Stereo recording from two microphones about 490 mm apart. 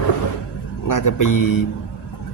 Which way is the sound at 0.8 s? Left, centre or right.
Left.